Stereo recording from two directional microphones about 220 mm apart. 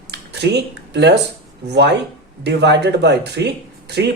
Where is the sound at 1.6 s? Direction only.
50° right (ahead or behind).